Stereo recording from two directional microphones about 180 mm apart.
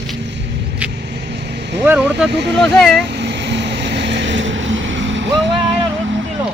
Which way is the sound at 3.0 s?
70° right (ahead or behind).